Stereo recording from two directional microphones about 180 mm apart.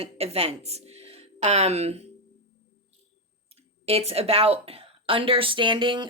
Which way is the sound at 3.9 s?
35° right (ahead or behind).